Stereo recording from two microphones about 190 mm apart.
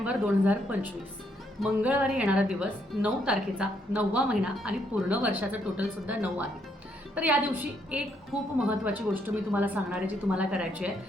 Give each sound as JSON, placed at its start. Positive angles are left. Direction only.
{"t": 0.0, "sound": "a woman's voice", "side_deg": -5}